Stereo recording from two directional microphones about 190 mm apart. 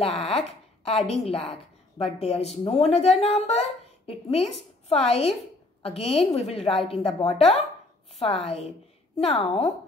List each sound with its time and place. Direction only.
0.0 s a woman's voice: 30° left (ahead or behind)